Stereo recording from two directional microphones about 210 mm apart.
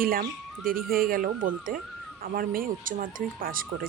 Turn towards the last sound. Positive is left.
turn(degrees=-45)  # may be behind; listen again after turning